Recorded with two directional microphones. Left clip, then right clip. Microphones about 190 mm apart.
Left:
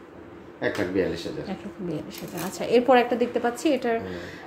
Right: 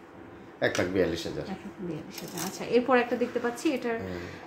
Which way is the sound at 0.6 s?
40° right (ahead or behind).